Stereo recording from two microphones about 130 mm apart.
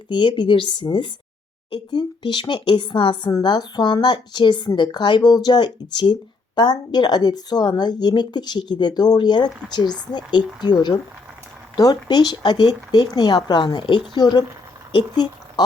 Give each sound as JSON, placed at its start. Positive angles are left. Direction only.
{"t": 0.1, "sound": "a woman's voice", "side_deg": 35}